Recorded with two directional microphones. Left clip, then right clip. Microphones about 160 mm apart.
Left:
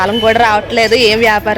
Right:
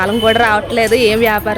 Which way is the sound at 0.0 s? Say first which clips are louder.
Left 2 dB; 10° right (ahead or behind).